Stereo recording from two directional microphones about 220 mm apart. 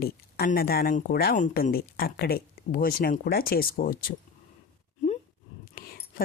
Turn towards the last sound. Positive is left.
turn(degrees=40)  # may be behind; listen again after turning